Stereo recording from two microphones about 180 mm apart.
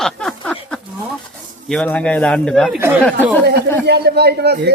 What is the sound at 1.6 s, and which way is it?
Speech, 5° left (ahead or behind).